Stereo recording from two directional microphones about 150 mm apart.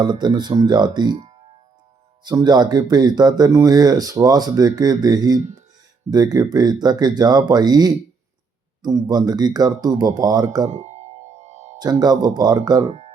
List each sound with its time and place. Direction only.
0.0 s speech: 30° right (ahead or behind)
2.2 s speech: 30° right (ahead or behind)
10.8 s music: 50° right (ahead or behind)
11.8 s speech: 25° right (ahead or behind)
12.9 s music: 40° right (ahead or behind)